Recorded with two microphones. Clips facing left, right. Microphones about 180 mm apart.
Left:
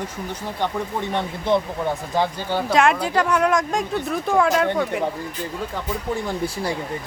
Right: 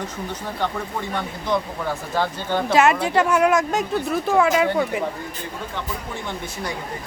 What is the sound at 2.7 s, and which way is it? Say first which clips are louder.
Speech: right 1 dB; 5° right (ahead or behind).